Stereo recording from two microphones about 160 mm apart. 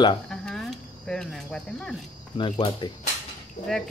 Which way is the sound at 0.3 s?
Centre (ahead or behind).